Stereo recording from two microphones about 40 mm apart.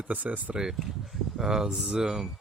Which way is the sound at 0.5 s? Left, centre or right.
Centre.